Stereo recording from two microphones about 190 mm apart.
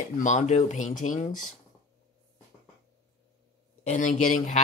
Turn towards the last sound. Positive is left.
turn(degrees=40)  # may be behind; listen again after turning